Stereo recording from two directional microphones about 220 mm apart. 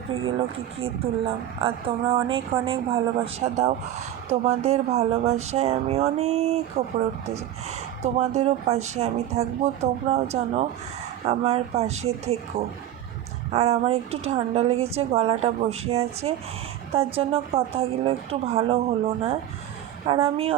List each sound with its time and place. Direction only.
0.1 s speech: 25° right (ahead or behind)